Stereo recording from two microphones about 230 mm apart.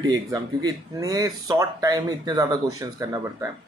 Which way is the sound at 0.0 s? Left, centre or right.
Centre.